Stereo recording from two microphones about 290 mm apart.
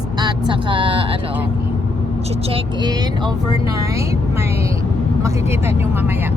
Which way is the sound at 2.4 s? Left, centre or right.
Centre.